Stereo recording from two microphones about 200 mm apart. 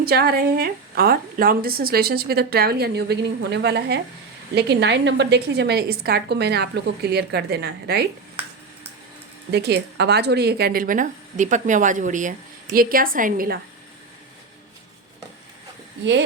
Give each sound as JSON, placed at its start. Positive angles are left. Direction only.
{"t": 0.0, "sound": "a woman's voice", "side_deg": -50}
{"t": 9.5, "sound": "a woman's voice", "side_deg": -55}